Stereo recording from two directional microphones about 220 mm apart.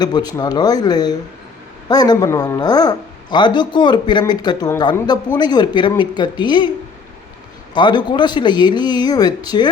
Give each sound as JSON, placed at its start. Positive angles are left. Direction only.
{"t": 0.0, "sound": "speech", "side_deg": 20}
{"t": 7.7, "sound": "speech", "side_deg": 20}